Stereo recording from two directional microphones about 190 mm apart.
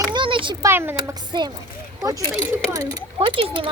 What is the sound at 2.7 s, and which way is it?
Speech, 20° right (ahead or behind).